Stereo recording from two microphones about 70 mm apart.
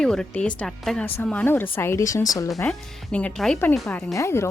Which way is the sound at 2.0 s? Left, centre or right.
Left.